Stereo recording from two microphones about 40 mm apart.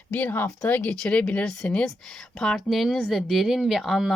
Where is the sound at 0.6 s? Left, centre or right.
Left.